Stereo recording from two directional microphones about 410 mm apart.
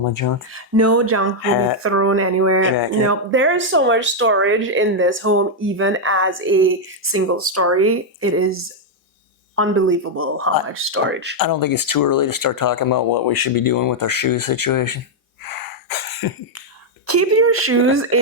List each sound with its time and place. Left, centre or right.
0.0 s speech: left
0.5 s speech: right
1.5 s speech: left
1.8 s speech: right
11.3 s speech: left
15.4 s cough: left
17.1 s speech: right